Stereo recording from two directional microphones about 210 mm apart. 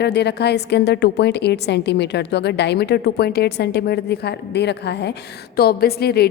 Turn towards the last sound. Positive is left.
turn(degrees=50)  # may be behind; listen again after turning